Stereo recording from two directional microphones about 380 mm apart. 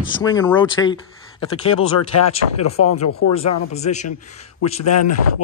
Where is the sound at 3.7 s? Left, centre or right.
Centre.